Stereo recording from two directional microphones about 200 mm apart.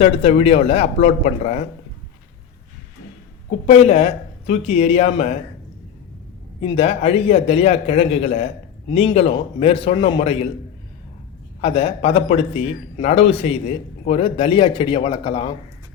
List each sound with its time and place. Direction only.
0.0 s a man's voice: 30° left (ahead or behind)
3.7 s a man's voice: 30° left (ahead or behind)
6.6 s a man's voice: 30° left (ahead or behind)
11.6 s a man's voice: 25° left (ahead or behind)